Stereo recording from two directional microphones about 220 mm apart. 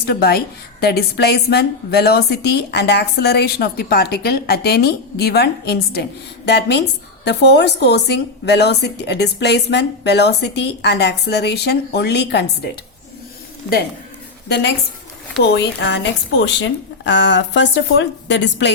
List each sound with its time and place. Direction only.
0.0 s a woman's voice: 45° left (ahead or behind)
14.4 s a woman's voice: 45° left (ahead or behind)